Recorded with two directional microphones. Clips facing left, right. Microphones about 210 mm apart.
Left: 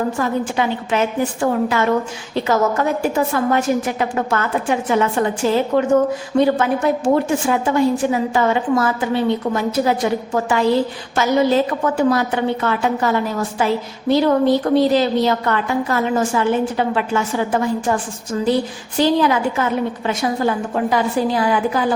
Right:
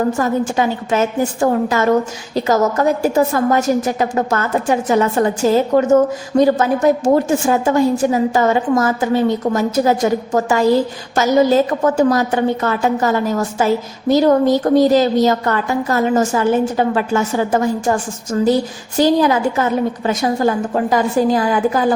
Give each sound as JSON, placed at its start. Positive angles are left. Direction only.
{"t": 0.2, "sound": "a woman's voice", "side_deg": -40}